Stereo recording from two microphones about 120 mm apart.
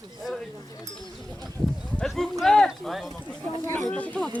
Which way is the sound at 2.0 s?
Centre (ahead or behind).